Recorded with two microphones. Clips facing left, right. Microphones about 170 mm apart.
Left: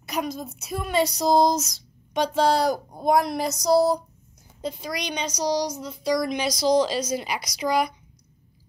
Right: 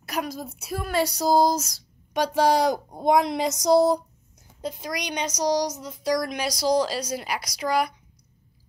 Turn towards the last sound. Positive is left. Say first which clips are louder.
# left 1 dB
turn(degrees=-5)  # may be behind; listen again after turning